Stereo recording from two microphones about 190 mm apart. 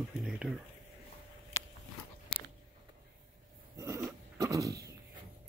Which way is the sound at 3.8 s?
15° right (ahead or behind).